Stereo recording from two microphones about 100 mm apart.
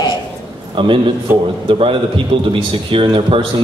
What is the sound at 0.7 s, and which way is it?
A man's voice, 60° right (ahead or behind).